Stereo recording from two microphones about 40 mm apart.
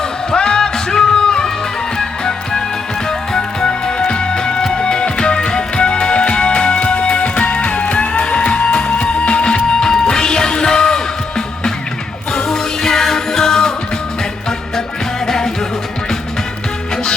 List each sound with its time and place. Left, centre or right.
0.3 s music: left
15.3 s music: centre